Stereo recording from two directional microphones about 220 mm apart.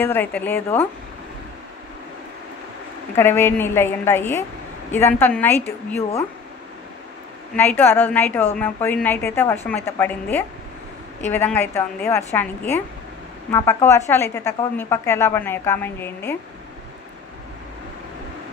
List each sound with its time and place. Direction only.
0.0 s a woman's voice: 10° left (ahead or behind)
3.2 s a woman's voice: 10° left (ahead or behind)
7.5 s a woman's voice: 10° left (ahead or behind)